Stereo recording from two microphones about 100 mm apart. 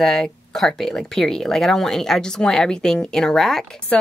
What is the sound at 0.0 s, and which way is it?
A woman's voice, 5° left (ahead or behind).